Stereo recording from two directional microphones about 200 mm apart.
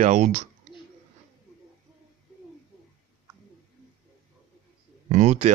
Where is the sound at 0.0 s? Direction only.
40° right (ahead or behind).